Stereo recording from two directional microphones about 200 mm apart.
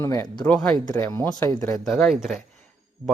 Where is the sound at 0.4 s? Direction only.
5° left (ahead or behind).